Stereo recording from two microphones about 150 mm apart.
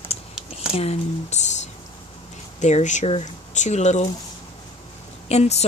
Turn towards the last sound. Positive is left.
turn(degrees=45)  # may be behind; listen again after turning